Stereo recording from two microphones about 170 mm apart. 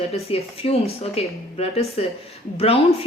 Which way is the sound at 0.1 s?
35° left (ahead or behind).